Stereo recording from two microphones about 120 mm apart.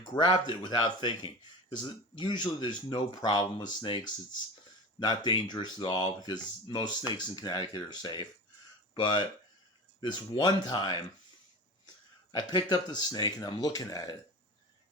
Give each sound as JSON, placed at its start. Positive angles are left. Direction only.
{"t": 0.0, "sound": "speech", "side_deg": 35}
{"t": 12.3, "sound": "speech", "side_deg": 35}